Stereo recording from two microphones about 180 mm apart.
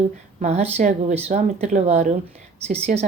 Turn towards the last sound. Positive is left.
turn(degrees=-35)  # may be behind; listen again after turning